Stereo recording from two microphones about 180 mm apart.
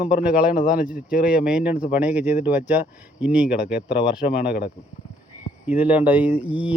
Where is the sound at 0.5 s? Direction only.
55° left (ahead or behind).